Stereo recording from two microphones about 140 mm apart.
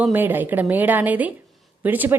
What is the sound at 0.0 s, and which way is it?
A woman's voice, 15° right (ahead or behind).